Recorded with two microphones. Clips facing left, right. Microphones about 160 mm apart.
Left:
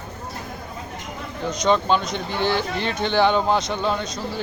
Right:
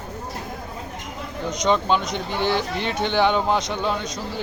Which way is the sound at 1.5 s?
15° right (ahead or behind).